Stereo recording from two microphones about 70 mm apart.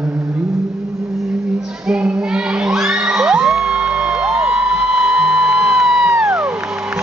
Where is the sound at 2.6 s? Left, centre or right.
Centre.